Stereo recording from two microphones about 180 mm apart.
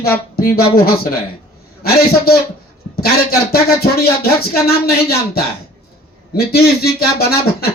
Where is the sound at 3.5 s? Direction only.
55° left (ahead or behind).